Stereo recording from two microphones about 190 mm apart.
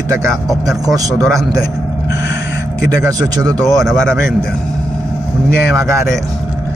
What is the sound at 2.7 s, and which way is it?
Speech, 20° right (ahead or behind).